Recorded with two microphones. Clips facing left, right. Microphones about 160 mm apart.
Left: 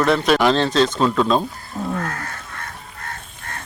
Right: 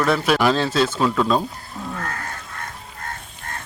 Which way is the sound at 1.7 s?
25° left (ahead or behind).